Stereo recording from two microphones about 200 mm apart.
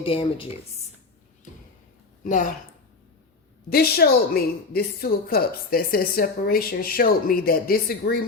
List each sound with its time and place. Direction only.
0.0 s speech: 25° left (ahead or behind)
2.2 s speech: 40° left (ahead or behind)
3.7 s a woman's voice: 50° left (ahead or behind)